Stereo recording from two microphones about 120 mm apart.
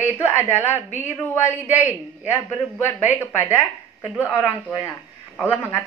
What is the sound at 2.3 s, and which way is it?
A woman's voice, 20° left (ahead or behind).